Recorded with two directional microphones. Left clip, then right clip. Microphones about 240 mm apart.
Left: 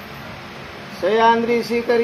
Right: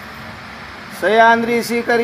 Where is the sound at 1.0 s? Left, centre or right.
Right.